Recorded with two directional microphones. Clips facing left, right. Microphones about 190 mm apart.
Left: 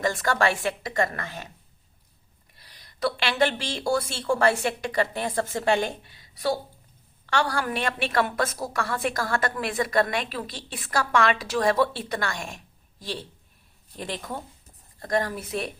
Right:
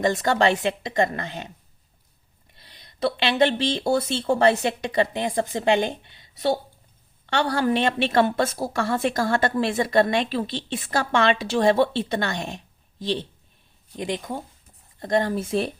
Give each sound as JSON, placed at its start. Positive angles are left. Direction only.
{"t": 0.0, "sound": "a woman's voice", "side_deg": -20}
{"t": 2.6, "sound": "a woman's voice", "side_deg": -25}